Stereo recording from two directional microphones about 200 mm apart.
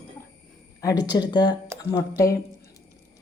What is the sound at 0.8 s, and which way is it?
A woman's voice, 20° left (ahead or behind).